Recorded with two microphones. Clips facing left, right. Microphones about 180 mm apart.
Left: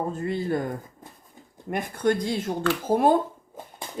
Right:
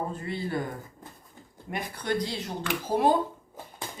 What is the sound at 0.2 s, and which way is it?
Speech, 45° left (ahead or behind).